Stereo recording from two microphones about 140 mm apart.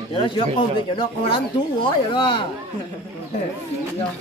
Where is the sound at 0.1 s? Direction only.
40° left (ahead or behind).